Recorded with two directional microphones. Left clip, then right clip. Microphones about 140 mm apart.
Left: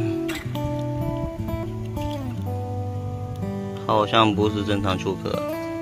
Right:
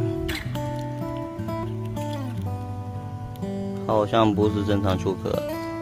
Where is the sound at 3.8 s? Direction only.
5° right (ahead or behind).